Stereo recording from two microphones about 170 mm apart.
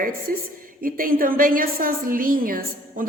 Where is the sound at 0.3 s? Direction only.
60° right (ahead or behind).